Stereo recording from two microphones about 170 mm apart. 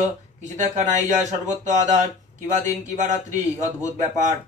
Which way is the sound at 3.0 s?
45° right (ahead or behind).